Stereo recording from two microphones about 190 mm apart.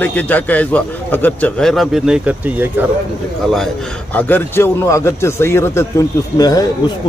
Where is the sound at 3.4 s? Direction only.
Centre (ahead or behind); by 6.7 s 20° left (ahead or behind).